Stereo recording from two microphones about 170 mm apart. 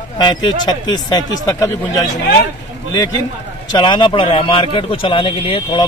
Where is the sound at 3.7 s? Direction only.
25° left (ahead or behind).